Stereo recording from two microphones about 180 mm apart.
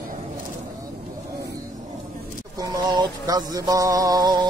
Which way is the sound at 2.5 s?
20° right (ahead or behind).